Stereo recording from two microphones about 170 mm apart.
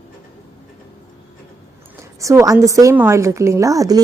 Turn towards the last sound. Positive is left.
turn(degrees=-20)  # may be behind; listen again after turning